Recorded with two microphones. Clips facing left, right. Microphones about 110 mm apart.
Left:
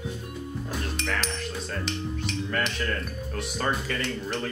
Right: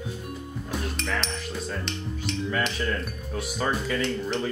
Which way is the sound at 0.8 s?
5° right (ahead or behind).